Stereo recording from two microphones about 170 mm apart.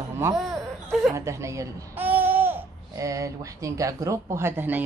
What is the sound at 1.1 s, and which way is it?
Speech, 15° right (ahead or behind).